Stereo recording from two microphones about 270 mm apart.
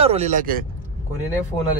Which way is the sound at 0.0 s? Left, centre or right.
Right.